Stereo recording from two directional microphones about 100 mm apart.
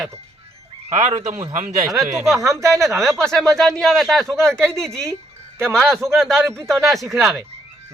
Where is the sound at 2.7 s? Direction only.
Centre (ahead or behind).